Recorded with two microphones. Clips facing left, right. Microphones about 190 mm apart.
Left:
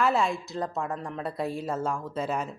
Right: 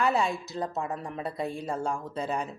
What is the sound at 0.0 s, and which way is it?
Speech, centre (ahead or behind).